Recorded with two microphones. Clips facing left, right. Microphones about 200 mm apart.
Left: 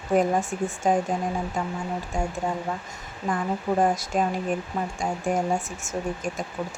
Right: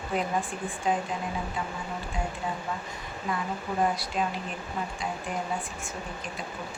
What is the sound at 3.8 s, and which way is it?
Speech, 45° left (ahead or behind).